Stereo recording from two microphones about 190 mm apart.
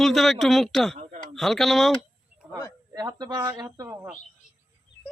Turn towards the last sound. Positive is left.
turn(degrees=-15)  # may be behind; listen again after turning